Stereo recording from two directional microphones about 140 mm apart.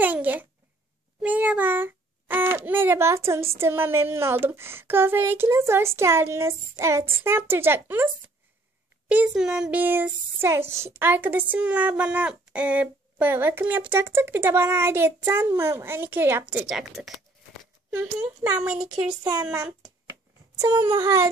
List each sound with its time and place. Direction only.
0.0 s a child's voice: 10° right (ahead or behind)
9.1 s a child's voice: 10° right (ahead or behind)
18.2 s speech: 25° right (ahead or behind)
18.6 s a child's voice: 5° right (ahead or behind)
19.2 s a sound: 25° right (ahead or behind)